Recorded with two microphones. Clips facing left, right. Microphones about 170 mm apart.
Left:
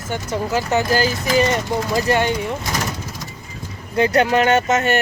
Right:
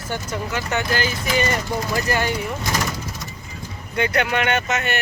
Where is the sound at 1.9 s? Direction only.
20° left (ahead or behind).